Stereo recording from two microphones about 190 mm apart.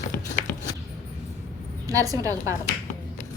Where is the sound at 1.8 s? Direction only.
20° right (ahead or behind).